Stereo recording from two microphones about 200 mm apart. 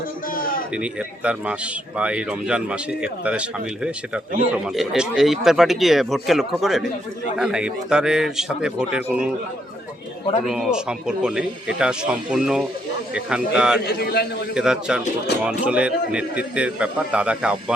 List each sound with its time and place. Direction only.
0.8 s speech: 5° right (ahead or behind)
4.5 s speech: centre (ahead or behind)
10.4 s speech: centre (ahead or behind)
13.8 s a man's voice: 55° left (ahead or behind)
14.5 s speech: 5° right (ahead or behind)